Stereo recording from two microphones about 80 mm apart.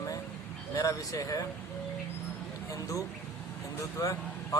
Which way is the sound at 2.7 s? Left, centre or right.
Left.